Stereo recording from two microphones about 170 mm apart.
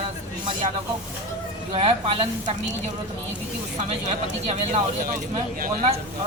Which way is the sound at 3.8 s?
40° right (ahead or behind).